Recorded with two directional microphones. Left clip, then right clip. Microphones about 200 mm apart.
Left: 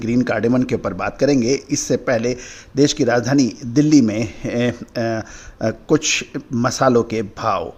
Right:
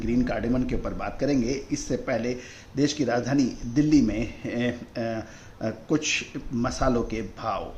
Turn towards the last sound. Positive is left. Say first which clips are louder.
# left 10 dB
turn(degrees=50)  # may be behind; listen again after turning